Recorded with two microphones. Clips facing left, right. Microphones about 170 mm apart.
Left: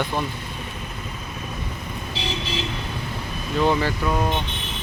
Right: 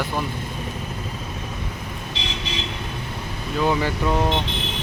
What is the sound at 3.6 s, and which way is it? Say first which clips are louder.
Speech: even; 10° right (ahead or behind).